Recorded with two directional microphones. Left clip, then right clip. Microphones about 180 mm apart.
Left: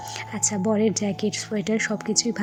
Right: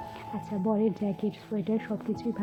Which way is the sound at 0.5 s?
10° left (ahead or behind).